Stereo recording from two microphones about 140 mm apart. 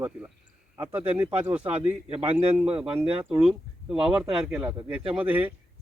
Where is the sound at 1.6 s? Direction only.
40° right (ahead or behind).